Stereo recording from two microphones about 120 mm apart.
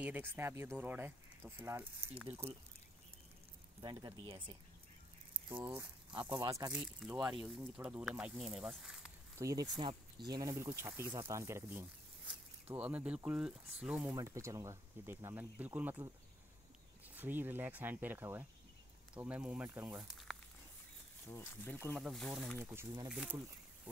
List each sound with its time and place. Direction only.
0.0 s speech: 15° right (ahead or behind)
3.8 s speech: 40° right (ahead or behind)
5.5 s speech: 20° right (ahead or behind)
6.1 s speech: 45° right (ahead or behind)
6.7 s speech: 10° right (ahead or behind)
9.4 s speech: 30° right (ahead or behind)
9.8 s speech: 40° right (ahead or behind); by 14.0 s 10° right (ahead or behind)
14.0 s speech: 25° right (ahead or behind)
17.1 s speech: 15° right (ahead or behind)
20.0 s speech: centre (ahead or behind)
21.3 s speech: 15° left (ahead or behind)
21.9 s speech: 5° left (ahead or behind)
22.6 s speech: 20° right (ahead or behind)
23.0 s speech: 10° right (ahead or behind)